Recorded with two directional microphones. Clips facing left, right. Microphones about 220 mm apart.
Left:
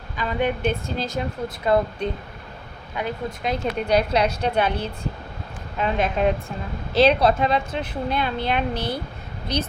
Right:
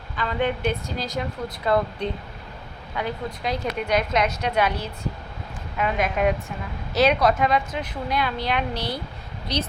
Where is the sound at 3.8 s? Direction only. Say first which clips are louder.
Left 3 dB; 30° left (ahead or behind).